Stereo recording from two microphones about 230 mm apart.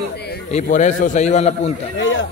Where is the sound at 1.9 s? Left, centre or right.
Left.